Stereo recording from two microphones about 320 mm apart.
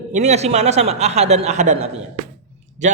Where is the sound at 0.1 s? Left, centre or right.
Right.